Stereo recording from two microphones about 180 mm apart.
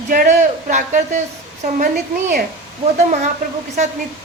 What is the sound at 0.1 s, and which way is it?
Speech, 45° right (ahead or behind).